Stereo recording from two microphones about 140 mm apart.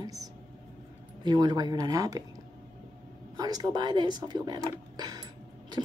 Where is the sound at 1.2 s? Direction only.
30° right (ahead or behind).